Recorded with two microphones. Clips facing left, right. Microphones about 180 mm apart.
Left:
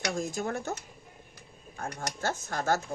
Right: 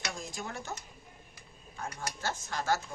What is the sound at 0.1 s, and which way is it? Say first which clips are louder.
Speech: left 11 dB; 45° left (ahead or behind).